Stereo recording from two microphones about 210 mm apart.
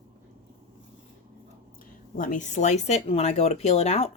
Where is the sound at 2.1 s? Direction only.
40° left (ahead or behind).